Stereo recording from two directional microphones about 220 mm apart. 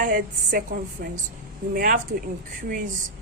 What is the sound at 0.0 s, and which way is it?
A woman's voice, 40° right (ahead or behind).